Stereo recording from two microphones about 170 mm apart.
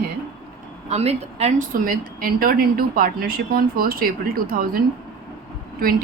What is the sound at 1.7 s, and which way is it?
A woman's voice, 55° right (ahead or behind).